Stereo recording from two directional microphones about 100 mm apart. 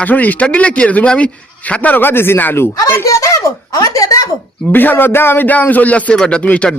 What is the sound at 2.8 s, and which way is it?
Speech, 30° left (ahead or behind).